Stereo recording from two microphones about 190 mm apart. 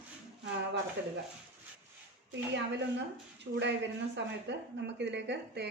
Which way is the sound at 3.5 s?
60° right (ahead or behind).